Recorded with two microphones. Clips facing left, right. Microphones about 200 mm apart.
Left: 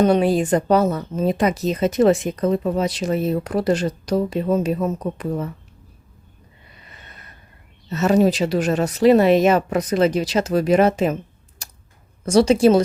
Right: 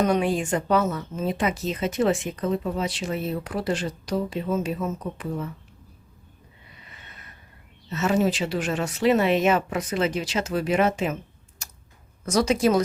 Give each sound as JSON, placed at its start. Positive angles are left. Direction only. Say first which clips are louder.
{"t": 0.0, "sound": "speech", "louder": "left 6 dB", "side_deg": 35}
{"t": 7.9, "sound": "speech", "louder": "left 6 dB", "side_deg": 40}
{"t": 11.6, "sound": "tick-tock", "louder": "left 2 dB", "side_deg": 35}
{"t": 12.2, "sound": "a woman's voice", "louder": "left 7 dB", "side_deg": 30}